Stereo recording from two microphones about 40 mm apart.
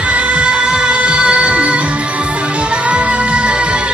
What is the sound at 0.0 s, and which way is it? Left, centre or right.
Music, right.